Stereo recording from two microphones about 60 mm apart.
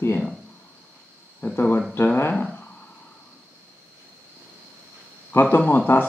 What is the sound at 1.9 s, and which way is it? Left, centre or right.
Speech, left.